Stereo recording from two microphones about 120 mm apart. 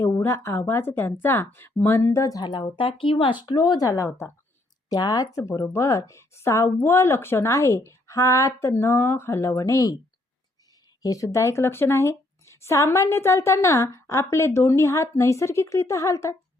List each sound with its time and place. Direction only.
0.0 s a woman's voice: 20° left (ahead or behind)
2.4 s a woman's voice: 40° left (ahead or behind)
11.0 s a woman's voice: 30° left (ahead or behind)